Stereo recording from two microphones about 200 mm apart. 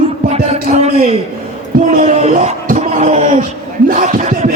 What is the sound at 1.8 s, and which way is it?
Speech, 40° right (ahead or behind).